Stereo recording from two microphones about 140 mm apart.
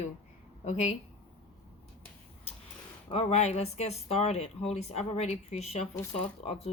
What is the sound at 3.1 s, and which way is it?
Speech, 45° left (ahead or behind).